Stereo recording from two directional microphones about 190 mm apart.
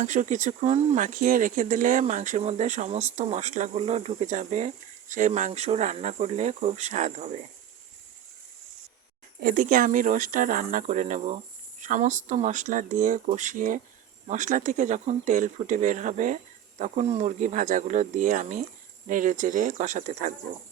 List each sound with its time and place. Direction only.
0.0 s speech: 40° right (ahead or behind)
9.4 s speech: 45° right (ahead or behind)